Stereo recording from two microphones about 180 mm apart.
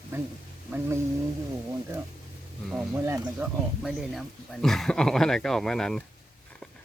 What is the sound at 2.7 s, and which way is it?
Speech, 15° right (ahead or behind).